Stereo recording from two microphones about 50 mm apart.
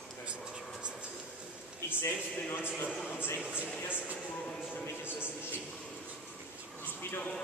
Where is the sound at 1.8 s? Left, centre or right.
Left.